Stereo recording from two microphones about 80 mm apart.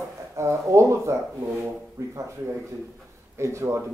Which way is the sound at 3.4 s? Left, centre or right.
Right.